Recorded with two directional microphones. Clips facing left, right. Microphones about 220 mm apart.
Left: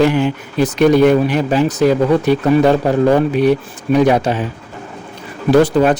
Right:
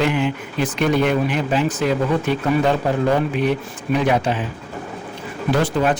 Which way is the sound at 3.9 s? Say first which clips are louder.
Left 6 dB; 40° left (ahead or behind).